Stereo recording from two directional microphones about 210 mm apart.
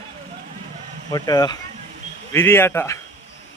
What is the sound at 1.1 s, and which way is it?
Speech, 20° left (ahead or behind).